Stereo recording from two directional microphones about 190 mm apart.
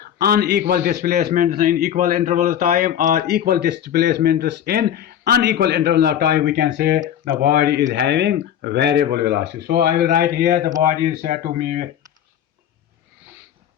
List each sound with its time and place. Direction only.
0.0 s a man's voice: 55° right (ahead or behind)